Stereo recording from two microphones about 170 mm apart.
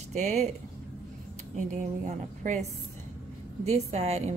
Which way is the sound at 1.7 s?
45° right (ahead or behind).